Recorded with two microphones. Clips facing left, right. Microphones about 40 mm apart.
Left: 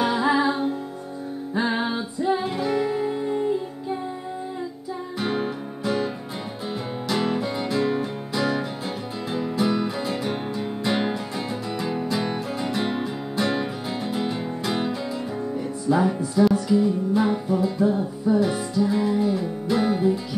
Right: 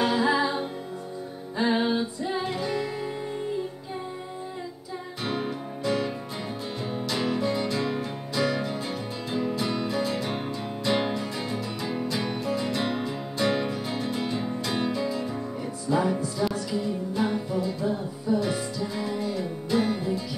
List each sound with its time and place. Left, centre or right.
0.0 s music: centre
1.6 s music: centre
5.2 s music: centre
7.1 s music: centre
15.9 s music: centre